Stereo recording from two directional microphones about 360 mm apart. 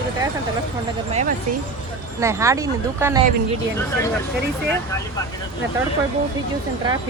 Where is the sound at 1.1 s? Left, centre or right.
Centre.